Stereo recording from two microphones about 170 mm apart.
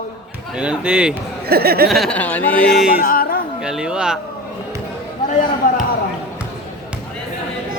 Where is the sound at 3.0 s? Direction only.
55° left (ahead or behind).